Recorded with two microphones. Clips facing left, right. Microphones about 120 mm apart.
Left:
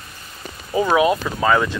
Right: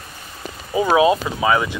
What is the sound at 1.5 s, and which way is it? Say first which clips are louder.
Speech: left 1 dB; 5° right (ahead or behind).